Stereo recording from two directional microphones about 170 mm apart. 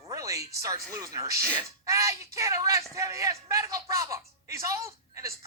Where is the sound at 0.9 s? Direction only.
20° right (ahead or behind).